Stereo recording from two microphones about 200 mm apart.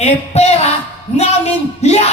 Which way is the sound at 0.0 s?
30° left (ahead or behind).